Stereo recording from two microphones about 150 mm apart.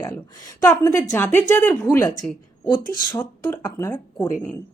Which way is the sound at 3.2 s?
15° left (ahead or behind).